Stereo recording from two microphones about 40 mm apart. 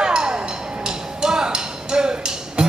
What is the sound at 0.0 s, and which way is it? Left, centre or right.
Music, centre.